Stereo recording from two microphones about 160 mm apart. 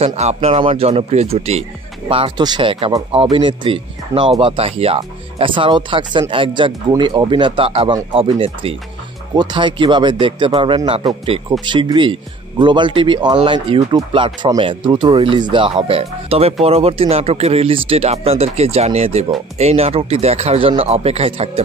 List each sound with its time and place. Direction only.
0.0 s speech: 45° right (ahead or behind)